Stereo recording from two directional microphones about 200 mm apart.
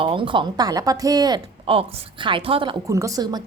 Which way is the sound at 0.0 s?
25° right (ahead or behind).